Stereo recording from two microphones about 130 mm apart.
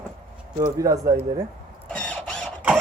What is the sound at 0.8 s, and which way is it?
Speech, 25° right (ahead or behind).